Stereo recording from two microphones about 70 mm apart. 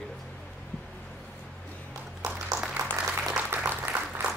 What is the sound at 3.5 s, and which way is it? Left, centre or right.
Applause, right.